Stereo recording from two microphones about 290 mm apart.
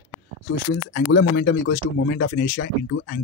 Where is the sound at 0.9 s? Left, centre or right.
Left.